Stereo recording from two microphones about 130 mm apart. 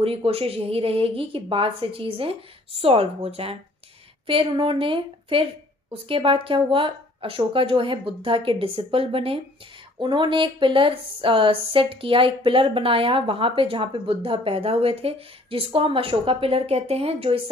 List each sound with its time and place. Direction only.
0.0 s speech: 45° right (ahead or behind)
4.3 s a woman's voice: 40° right (ahead or behind)